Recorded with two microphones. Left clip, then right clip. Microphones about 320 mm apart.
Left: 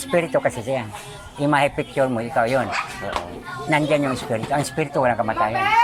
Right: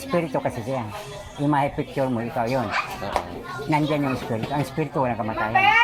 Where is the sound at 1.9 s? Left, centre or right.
Left.